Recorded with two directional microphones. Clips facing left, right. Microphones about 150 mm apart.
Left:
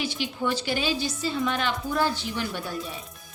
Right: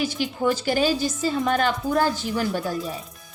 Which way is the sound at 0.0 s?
45° right (ahead or behind).